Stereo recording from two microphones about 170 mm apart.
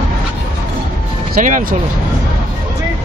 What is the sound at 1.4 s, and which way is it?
Speech, 50° right (ahead or behind).